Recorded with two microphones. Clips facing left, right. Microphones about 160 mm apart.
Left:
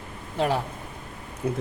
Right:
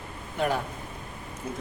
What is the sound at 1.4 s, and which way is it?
Speech, 65° left (ahead or behind).